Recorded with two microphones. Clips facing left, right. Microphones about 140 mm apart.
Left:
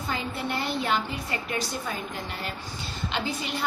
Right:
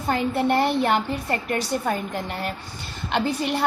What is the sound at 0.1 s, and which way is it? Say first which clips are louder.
A woman's voice: right 10 dB; 60° right (ahead or behind).